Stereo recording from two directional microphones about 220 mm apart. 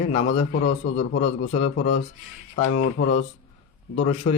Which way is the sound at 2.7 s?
40° left (ahead or behind).